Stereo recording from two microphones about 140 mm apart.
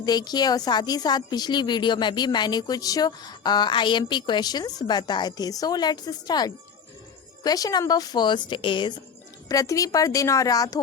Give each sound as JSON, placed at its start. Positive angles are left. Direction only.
{"t": 0.0, "sound": "a woman's voice", "side_deg": 30}
{"t": 9.5, "sound": "a woman's voice", "side_deg": 25}